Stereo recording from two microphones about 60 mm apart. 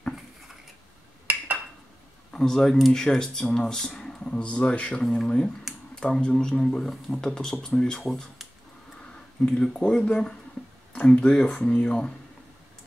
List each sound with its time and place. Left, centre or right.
2.3 s speech: centre
8.0 s speech: centre
9.5 s speech: centre